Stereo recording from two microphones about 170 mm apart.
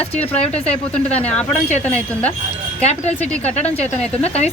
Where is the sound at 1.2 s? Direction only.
10° left (ahead or behind).